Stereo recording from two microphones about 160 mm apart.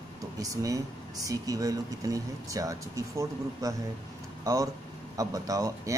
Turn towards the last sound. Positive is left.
turn(degrees=-20)  # may be behind; listen again after turning